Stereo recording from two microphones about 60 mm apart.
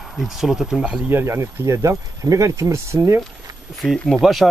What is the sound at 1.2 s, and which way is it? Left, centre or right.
Speech, right.